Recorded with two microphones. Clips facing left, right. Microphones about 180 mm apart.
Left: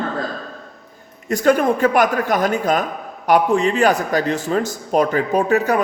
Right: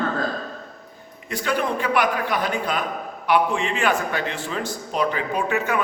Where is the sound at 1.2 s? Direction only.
45° left (ahead or behind).